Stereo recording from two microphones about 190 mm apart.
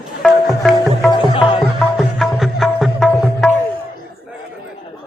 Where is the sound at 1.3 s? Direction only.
25° left (ahead or behind).